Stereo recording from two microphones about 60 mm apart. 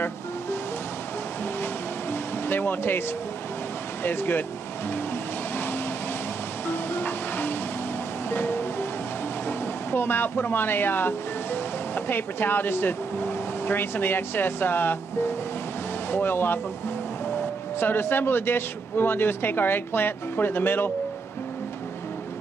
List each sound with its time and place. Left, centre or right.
1.4 s music: left
4.0 s a man's voice: left
6.7 s music: left
9.5 s speech: left
16.1 s a man's voice: left
17.7 s a man's voice: left